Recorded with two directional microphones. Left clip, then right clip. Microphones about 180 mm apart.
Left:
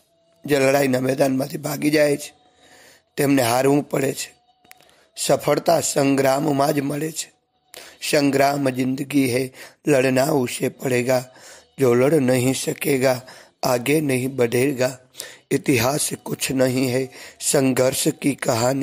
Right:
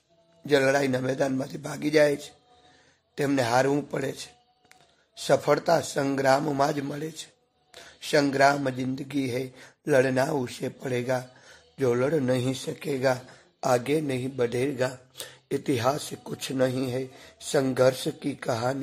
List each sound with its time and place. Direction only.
0.5 s a man's voice: 30° left (ahead or behind)